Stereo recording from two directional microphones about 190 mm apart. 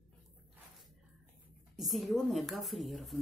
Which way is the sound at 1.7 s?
Centre (ahead or behind).